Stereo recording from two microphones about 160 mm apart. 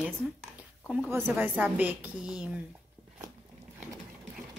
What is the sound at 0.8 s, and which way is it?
A woman's voice, 10° right (ahead or behind).